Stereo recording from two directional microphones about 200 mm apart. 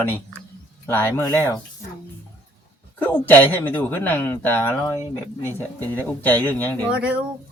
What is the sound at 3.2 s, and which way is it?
Speech, 10° left (ahead or behind).